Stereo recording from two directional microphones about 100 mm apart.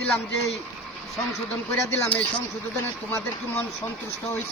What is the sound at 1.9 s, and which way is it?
Speech, 15° left (ahead or behind).